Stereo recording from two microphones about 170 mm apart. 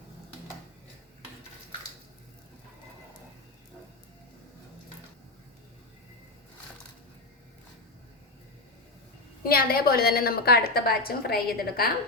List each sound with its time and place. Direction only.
9.4 s a woman's voice: 60° left (ahead or behind)